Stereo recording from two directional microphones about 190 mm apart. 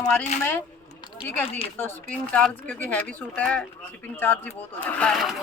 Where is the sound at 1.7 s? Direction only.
10° left (ahead or behind).